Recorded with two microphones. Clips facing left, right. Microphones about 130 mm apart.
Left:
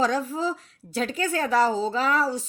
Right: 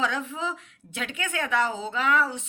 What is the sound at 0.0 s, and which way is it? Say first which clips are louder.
A woman's voice: left 5 dB; 40° left (ahead or behind).